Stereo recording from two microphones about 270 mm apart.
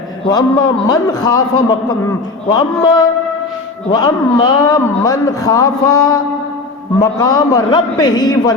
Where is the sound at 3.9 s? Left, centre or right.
Centre.